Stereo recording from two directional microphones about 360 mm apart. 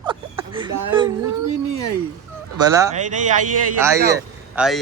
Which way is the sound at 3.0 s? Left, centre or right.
Right.